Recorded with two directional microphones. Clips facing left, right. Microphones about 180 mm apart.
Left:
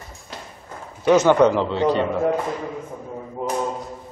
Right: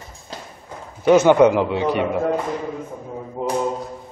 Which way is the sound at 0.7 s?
15° right (ahead or behind).